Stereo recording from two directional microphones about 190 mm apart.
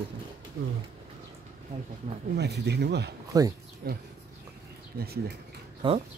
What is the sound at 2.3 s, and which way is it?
Speech, 60° right (ahead or behind).